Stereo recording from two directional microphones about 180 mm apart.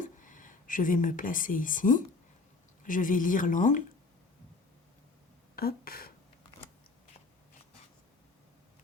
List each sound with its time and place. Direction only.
0.0 s speech: 45° left (ahead or behind)
5.5 s speech: 55° left (ahead or behind)